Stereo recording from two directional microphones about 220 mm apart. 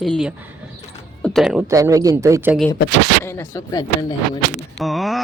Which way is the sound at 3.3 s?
15° left (ahead or behind).